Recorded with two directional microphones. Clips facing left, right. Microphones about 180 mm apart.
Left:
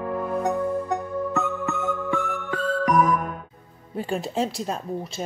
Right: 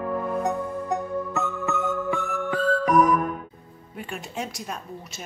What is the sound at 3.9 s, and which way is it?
Speech, 30° left (ahead or behind).